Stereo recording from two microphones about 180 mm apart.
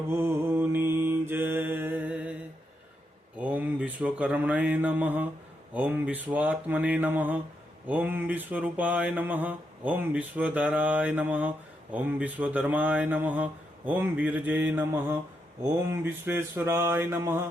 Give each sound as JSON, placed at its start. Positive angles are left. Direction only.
{"t": 0.1, "sound": "mantra", "side_deg": -15}
{"t": 3.3, "sound": "mantra", "side_deg": -10}